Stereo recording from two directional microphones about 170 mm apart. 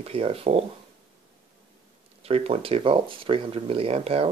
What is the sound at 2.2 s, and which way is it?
Speech, 35° right (ahead or behind).